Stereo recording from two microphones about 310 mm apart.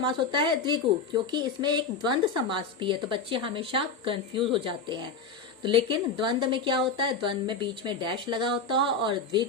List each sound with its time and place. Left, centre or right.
0.0 s a woman's voice: centre